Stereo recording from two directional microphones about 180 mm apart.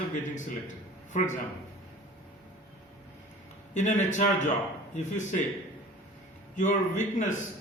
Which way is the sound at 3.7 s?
40° left (ahead or behind).